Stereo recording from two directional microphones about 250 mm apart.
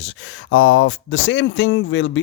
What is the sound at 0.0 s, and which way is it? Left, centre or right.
Speech, left.